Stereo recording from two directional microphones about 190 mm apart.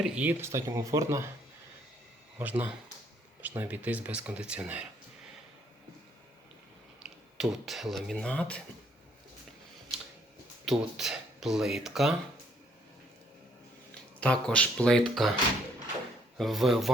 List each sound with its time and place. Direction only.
0.0 s speech: 10° right (ahead or behind)
2.4 s speech: 10° right (ahead or behind)
7.0 s speech: centre (ahead or behind)
10.7 s speech: centre (ahead or behind)
14.2 s speech: 5° left (ahead or behind)
16.4 s speech: centre (ahead or behind)